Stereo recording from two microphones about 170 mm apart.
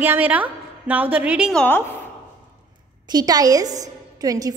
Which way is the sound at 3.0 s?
25° right (ahead or behind).